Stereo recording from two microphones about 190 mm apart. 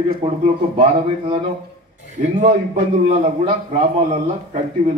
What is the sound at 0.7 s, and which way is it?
Speech, 25° right (ahead or behind).